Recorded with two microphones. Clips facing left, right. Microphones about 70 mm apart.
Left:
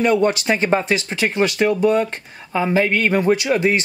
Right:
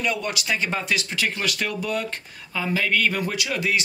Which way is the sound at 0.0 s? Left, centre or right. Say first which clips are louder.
Left 10 dB; left.